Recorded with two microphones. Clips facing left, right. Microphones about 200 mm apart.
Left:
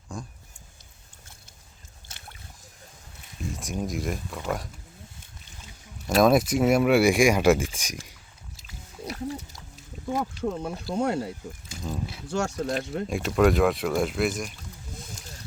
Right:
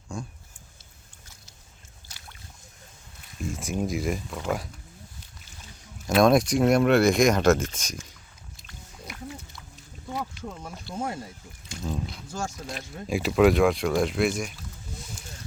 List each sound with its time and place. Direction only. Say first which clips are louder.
0.1 s speech: right 2 dB; centre (ahead or behind)
3.5 s speech: right 3 dB; centre (ahead or behind)
6.1 s speech: even; 5° left (ahead or behind)
9.0 s a sound: left 7 dB; 35° left (ahead or behind)
10.6 s speech: left 2 dB; 65° left (ahead or behind)
11.7 s speech: right 2 dB; centre (ahead or behind)
12.3 s speech: left 10 dB; 70° left (ahead or behind)
13.1 s speech: right 2 dB; 5° right (ahead or behind)